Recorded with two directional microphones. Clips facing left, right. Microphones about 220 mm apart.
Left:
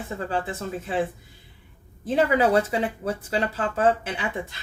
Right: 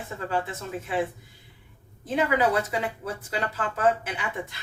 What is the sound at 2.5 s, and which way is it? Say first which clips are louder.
Speech: left 4 dB; 30° left (ahead or behind).